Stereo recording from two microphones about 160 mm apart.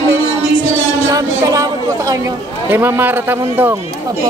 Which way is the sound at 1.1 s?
20° right (ahead or behind).